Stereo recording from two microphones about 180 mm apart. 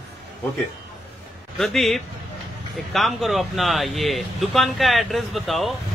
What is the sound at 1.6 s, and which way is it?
Speech, centre (ahead or behind).